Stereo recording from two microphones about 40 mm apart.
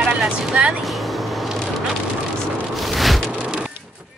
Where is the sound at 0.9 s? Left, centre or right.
Centre.